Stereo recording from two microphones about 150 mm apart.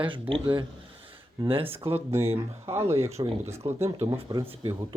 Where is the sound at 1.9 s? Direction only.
15° right (ahead or behind).